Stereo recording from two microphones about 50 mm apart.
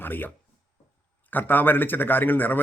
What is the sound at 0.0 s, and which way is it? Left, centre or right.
Speech, left.